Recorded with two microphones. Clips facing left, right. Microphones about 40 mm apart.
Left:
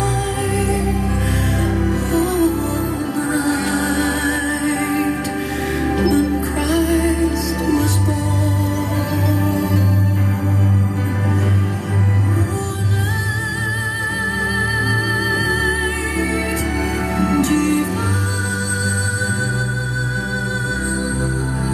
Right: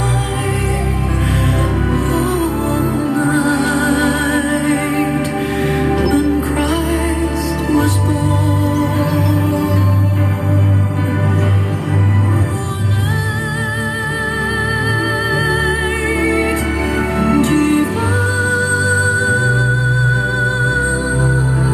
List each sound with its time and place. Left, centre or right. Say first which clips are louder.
2.1 s music: left 4 dB; right
15.3 s music: right 3 dB; right
17.2 s music: right 3 dB; right